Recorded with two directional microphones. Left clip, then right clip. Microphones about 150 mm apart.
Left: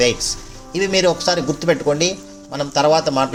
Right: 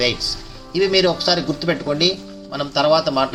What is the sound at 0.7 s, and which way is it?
Speech, 40° left (ahead or behind).